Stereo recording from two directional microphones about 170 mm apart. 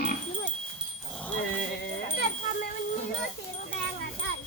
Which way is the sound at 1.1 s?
5° left (ahead or behind).